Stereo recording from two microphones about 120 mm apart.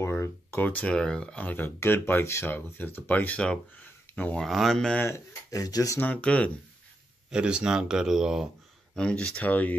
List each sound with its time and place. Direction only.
0.0 s speech: 20° left (ahead or behind)
4.4 s speech: centre (ahead or behind)
5.0 s speech: 25° left (ahead or behind)
5.9 s speech: 10° left (ahead or behind)
7.2 s speech: 5° right (ahead or behind)
8.9 s speech: 10° left (ahead or behind)